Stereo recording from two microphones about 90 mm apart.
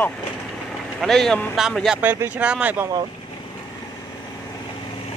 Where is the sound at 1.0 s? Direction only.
5° left (ahead or behind).